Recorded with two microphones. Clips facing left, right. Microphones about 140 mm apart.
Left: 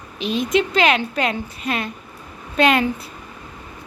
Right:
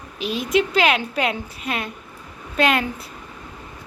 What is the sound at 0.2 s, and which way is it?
A woman's voice, 5° right (ahead or behind).